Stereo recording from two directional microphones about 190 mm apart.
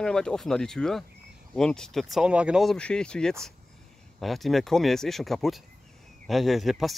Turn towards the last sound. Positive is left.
turn(degrees=0)  # may be behind; listen again after turning